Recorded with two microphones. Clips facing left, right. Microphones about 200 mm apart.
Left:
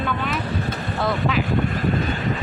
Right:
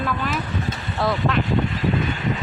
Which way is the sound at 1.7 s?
50° left (ahead or behind).